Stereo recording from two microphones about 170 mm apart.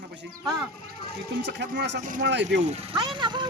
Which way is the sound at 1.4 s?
90° right.